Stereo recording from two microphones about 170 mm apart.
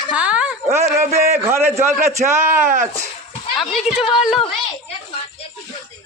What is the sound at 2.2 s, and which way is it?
Speech, 50° right (ahead or behind).